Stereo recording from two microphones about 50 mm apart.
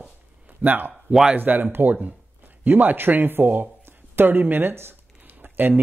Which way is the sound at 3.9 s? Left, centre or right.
Right.